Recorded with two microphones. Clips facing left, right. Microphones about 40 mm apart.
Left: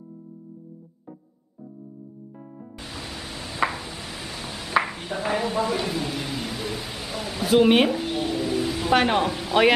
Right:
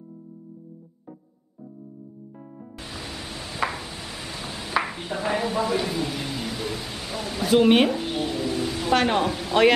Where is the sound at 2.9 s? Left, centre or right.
Centre.